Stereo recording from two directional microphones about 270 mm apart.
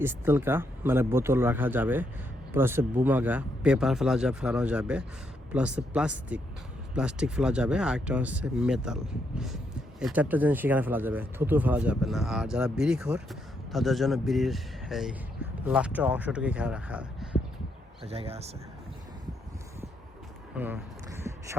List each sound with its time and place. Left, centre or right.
0.0 s speech: centre
10.0 s speech: centre
18.0 s speech: right
20.6 s a sound: centre